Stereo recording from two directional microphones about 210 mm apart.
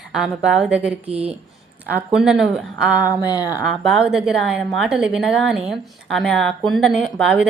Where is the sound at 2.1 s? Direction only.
Centre (ahead or behind).